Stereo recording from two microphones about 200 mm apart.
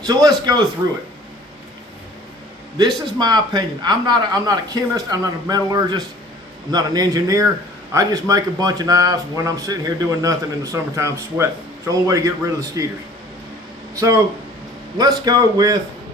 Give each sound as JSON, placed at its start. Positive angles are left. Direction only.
{"t": 0.0, "sound": "a man's voice", "side_deg": -20}
{"t": 2.7, "sound": "a man's voice", "side_deg": -20}
{"t": 13.9, "sound": "a man's voice", "side_deg": -15}